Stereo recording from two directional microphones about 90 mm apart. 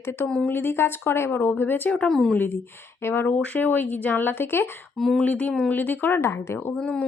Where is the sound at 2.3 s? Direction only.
25° left (ahead or behind).